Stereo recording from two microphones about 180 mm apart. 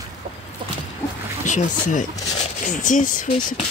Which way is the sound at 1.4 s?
45° left (ahead or behind).